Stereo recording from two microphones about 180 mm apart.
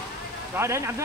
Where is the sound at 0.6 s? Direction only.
15° right (ahead or behind).